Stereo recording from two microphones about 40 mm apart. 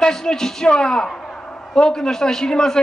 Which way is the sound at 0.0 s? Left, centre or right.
Centre.